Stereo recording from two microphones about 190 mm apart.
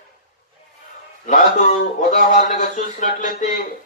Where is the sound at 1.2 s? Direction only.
40° left (ahead or behind).